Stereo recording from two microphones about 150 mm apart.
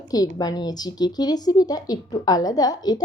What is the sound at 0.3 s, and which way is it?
A woman's voice, 25° left (ahead or behind).